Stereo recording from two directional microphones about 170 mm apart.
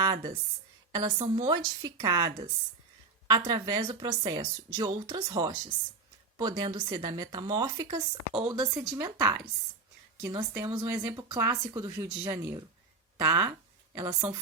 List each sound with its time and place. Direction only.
0.0 s a woman's voice: 25° right (ahead or behind)
8.7 s speech: centre (ahead or behind)
9.0 s a woman's voice: 20° right (ahead or behind)